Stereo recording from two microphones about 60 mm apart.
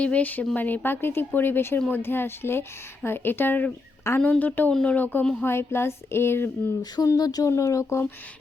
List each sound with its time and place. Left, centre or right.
0.0 s a woman's voice: left
4.7 s speech: centre
4.9 s a woman's voice: left
5.4 s speech: left
7.0 s speech: left
7.5 s speech: left